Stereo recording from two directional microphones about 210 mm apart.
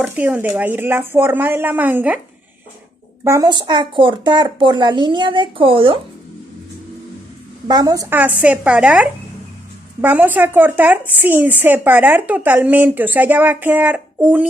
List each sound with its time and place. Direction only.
0.0 s a woman's voice: 10° right (ahead or behind)
3.2 s a woman's voice: 15° right (ahead or behind)
7.7 s a woman's voice: 20° right (ahead or behind)